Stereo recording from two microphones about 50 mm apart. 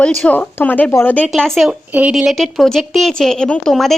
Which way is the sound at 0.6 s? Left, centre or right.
Left.